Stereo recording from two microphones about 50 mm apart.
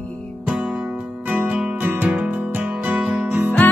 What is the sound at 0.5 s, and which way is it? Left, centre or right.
Music, centre.